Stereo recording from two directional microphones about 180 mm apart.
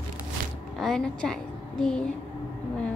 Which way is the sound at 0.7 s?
Centre (ahead or behind).